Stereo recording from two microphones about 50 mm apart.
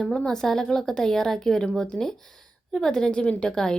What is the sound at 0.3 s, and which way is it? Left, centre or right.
Speech, centre.